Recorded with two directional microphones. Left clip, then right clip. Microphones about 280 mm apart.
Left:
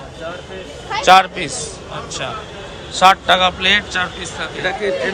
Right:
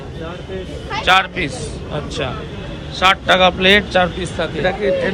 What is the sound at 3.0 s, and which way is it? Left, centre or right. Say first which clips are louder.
A man's voice: left 1 dB; centre.